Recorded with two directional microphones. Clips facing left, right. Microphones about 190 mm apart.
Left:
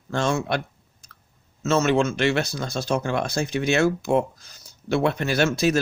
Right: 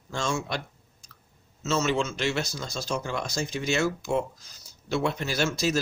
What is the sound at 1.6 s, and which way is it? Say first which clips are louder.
Speech: left 6 dB; 60° left (ahead or behind).